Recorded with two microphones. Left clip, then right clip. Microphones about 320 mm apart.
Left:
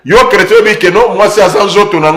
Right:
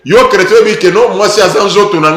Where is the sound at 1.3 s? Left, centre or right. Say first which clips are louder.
Left 1 dB; left.